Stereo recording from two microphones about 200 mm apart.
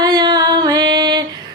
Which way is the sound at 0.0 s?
20° right (ahead or behind).